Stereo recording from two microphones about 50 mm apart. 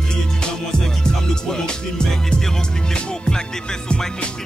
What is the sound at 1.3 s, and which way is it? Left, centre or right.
Music, centre.